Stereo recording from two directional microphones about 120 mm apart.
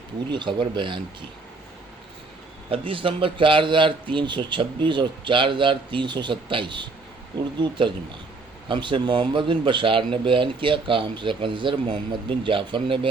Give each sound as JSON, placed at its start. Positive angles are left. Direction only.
{"t": 0.3, "sound": "speech", "side_deg": -40}
{"t": 2.6, "sound": "speech", "side_deg": -50}